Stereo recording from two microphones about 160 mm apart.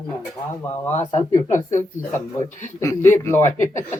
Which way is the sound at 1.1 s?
20° left (ahead or behind).